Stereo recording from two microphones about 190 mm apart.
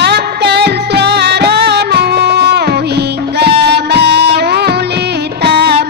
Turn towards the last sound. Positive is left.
turn(degrees=-60)  # may be behind; listen again after turning